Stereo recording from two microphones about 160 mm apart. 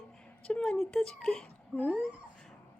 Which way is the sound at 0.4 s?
5° left (ahead or behind).